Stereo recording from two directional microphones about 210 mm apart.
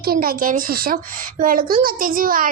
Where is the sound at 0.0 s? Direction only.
45° right (ahead or behind).